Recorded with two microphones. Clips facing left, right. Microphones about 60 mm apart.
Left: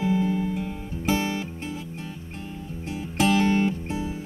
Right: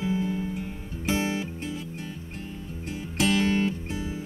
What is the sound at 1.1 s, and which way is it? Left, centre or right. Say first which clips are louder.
Music: even; right.